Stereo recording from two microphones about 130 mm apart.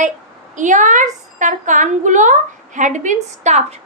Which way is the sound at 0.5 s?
75° right (ahead or behind).